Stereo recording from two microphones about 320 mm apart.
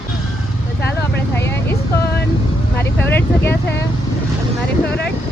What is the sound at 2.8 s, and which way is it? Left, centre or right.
Vehicle, centre.